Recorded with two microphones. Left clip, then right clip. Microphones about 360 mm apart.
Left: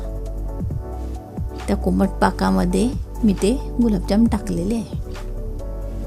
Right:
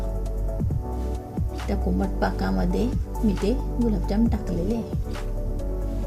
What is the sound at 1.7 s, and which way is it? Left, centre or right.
A woman's voice, left.